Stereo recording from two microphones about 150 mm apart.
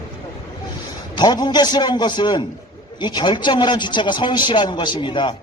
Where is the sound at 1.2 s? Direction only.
30° left (ahead or behind).